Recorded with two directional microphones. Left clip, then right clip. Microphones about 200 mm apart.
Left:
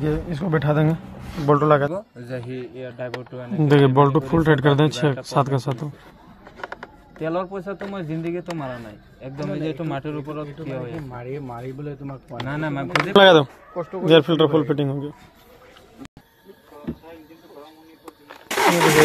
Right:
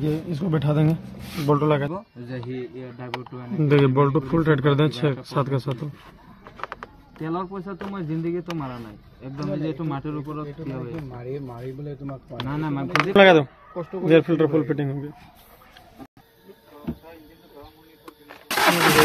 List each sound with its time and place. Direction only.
0.0 s speech: centre (ahead or behind)
1.3 s speech: 10° left (ahead or behind)
2.2 s speech: 30° left (ahead or behind)
7.2 s speech: 25° left (ahead or behind)
12.4 s speech: 30° left (ahead or behind)